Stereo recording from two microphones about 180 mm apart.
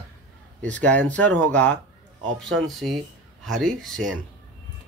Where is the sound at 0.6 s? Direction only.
5° left (ahead or behind).